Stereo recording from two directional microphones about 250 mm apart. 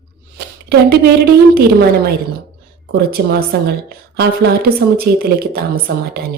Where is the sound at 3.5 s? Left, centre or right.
Right.